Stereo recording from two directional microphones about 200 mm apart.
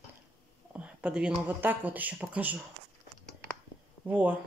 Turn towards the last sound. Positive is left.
turn(degrees=-10)  # may be behind; listen again after turning